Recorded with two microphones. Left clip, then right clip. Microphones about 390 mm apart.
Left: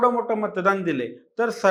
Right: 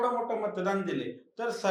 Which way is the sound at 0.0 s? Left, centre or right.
Left.